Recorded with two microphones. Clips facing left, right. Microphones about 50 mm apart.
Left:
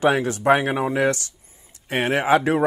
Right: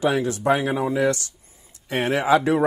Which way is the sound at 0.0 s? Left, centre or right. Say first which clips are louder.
Left 2 dB; left.